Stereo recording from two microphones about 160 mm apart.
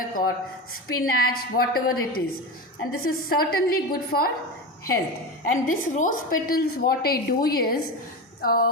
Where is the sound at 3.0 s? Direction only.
70° left (ahead or behind).